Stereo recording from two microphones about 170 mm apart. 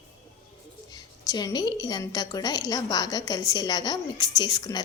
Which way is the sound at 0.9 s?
25° left (ahead or behind).